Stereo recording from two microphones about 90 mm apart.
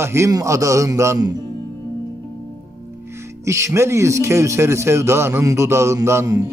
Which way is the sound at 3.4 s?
35° right (ahead or behind).